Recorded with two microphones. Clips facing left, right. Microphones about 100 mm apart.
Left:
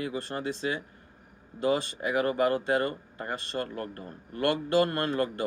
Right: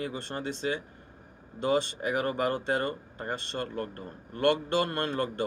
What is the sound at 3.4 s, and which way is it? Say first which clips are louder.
Speech: even; 40° left (ahead or behind).